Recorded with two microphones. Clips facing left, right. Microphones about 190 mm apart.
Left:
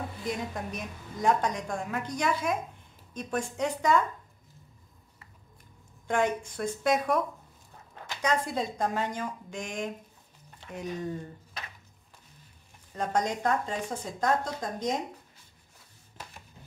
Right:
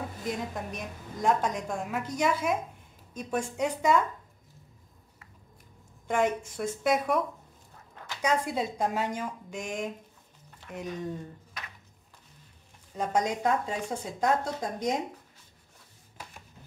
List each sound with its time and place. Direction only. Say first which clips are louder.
0.7 s a woman's voice: even; centre (ahead or behind)
6.0 s a woman's voice: even; 5° right (ahead or behind)
12.9 s speech: right 1 dB; 5° right (ahead or behind)